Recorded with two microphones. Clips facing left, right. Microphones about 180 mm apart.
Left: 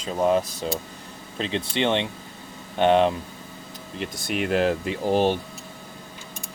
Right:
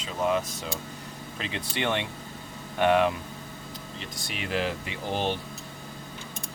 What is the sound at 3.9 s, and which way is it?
Speech, 55° left (ahead or behind).